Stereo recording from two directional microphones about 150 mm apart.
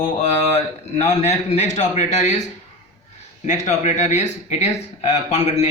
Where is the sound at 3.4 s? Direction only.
55° left (ahead or behind).